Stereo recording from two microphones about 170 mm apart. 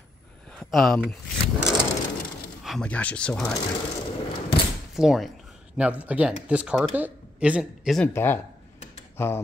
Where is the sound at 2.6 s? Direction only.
5° left (ahead or behind).